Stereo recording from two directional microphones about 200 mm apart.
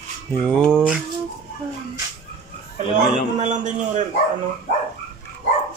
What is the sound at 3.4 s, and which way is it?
Speech, 40° right (ahead or behind).